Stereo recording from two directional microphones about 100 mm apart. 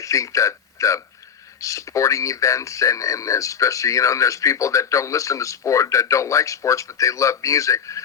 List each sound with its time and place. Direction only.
0.0 s speech: 30° left (ahead or behind)